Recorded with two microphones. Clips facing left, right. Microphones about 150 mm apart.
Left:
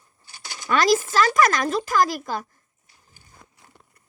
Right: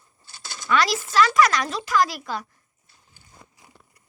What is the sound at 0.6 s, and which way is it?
Speech, 45° left (ahead or behind).